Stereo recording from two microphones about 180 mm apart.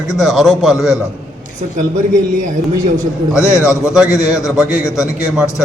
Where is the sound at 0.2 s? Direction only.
Centre (ahead or behind).